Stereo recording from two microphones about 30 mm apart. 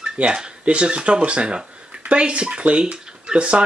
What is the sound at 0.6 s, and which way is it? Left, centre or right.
Speech, right.